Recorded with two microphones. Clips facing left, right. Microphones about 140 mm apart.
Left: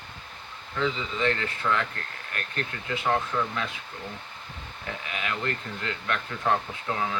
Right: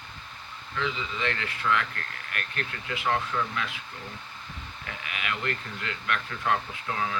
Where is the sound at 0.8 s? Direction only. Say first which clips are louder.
Left 4 dB; 35° left (ahead or behind).